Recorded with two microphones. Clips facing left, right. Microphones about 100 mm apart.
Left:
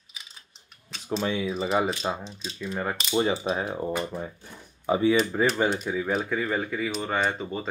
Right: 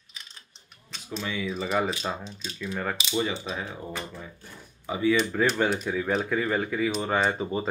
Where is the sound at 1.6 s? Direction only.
5° left (ahead or behind).